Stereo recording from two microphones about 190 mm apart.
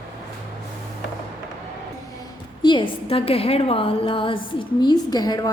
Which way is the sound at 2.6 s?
25° left (ahead or behind).